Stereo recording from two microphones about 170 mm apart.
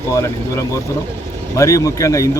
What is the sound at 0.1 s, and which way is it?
Speech, 15° left (ahead or behind).